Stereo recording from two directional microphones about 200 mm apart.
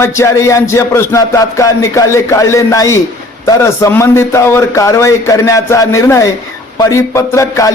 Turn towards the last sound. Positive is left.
turn(degrees=15)  # may be behind; listen again after turning